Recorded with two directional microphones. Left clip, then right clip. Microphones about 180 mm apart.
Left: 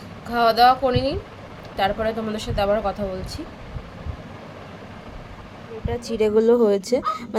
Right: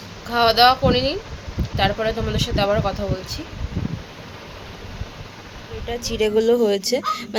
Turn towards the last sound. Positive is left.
turn(degrees=15)  # may be behind; listen again after turning